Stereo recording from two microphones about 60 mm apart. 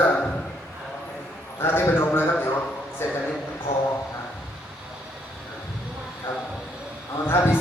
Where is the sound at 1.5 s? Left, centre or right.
Left.